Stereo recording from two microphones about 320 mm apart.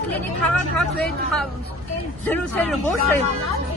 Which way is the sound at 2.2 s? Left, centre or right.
Centre.